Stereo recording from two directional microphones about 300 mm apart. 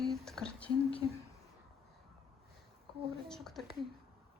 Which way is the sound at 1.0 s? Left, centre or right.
Centre.